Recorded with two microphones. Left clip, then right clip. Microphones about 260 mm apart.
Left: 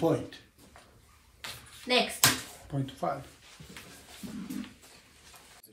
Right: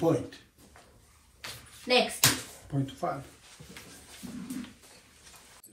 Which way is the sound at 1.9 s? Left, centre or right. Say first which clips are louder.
Right 2 dB; centre.